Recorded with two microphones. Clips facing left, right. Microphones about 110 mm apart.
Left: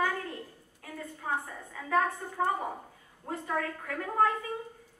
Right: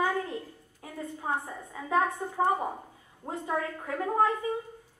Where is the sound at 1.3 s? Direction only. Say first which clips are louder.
Right 1 dB; 20° right (ahead or behind).